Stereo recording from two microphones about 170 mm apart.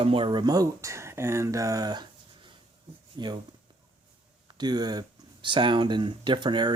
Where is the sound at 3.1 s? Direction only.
25° right (ahead or behind).